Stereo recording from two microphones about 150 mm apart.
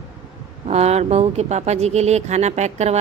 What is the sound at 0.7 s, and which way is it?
Speech, 45° right (ahead or behind).